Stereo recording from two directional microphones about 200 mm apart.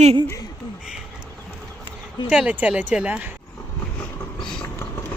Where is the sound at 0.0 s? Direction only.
30° right (ahead or behind).